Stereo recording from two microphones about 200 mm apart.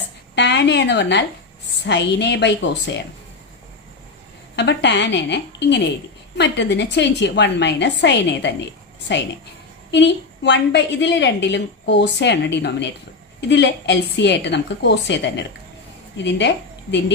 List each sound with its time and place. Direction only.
0.3 s a woman's voice: 60° left (ahead or behind)
4.5 s a woman's voice: 60° left (ahead or behind)
9.9 s a woman's voice: 60° left (ahead or behind)